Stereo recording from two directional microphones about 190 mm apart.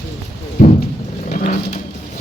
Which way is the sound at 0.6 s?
40° left (ahead or behind).